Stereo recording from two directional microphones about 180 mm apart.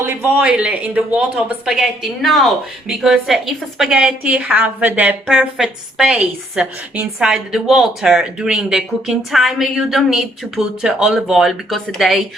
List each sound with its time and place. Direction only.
0.0 s speech: 10° right (ahead or behind)